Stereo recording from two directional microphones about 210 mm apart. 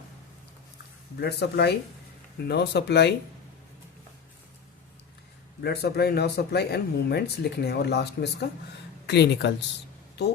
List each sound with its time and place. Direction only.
1.2 s speech: 50° left (ahead or behind)
5.6 s speech: 50° left (ahead or behind)